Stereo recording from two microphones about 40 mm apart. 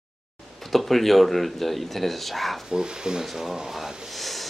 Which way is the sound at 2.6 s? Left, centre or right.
Centre.